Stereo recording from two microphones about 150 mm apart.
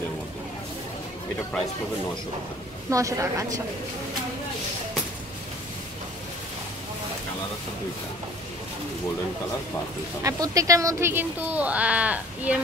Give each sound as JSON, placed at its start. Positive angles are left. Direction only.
{"t": 2.9, "sound": "a woman's voice", "side_deg": -20}
{"t": 10.2, "sound": "speech", "side_deg": -20}